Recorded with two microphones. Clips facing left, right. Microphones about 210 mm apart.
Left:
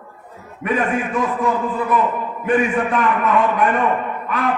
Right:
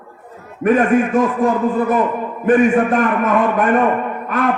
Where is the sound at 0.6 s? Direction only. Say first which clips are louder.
Right 7 dB; 45° right (ahead or behind).